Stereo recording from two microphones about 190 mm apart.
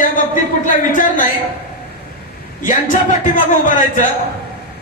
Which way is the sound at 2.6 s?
40° left (ahead or behind).